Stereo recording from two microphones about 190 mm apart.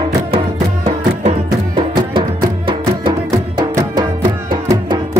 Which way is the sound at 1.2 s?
25° right (ahead or behind).